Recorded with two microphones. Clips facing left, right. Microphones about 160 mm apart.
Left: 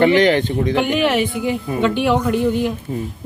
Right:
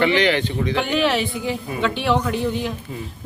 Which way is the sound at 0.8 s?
15° left (ahead or behind).